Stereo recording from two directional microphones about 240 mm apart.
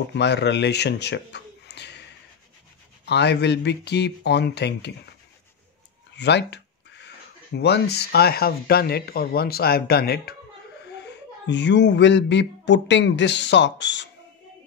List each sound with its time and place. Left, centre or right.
0.1 s speech: left
3.1 s speech: left
6.1 s a sound: left
7.5 s a child's voice: left